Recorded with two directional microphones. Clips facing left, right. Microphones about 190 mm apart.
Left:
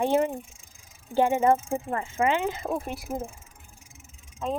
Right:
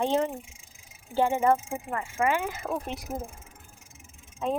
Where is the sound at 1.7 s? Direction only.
30° left (ahead or behind).